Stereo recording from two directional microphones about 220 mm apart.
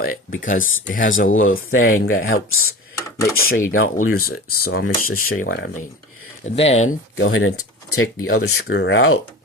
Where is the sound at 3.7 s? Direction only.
70° left (ahead or behind).